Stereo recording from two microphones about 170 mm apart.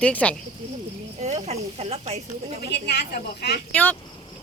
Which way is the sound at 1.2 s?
40° right (ahead or behind).